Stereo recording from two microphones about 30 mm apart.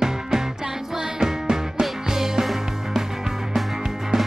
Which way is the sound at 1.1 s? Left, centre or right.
Centre.